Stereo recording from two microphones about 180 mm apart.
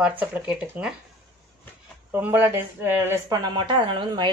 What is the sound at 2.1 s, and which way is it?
A woman's voice, 10° right (ahead or behind).